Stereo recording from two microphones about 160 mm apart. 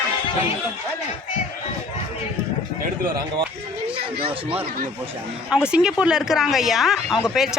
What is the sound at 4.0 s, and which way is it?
Speech, 35° right (ahead or behind).